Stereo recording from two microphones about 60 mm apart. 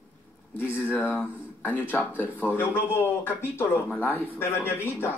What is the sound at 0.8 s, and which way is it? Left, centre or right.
Speech, left.